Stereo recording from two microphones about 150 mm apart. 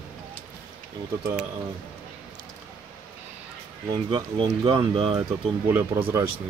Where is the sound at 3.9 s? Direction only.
35° right (ahead or behind).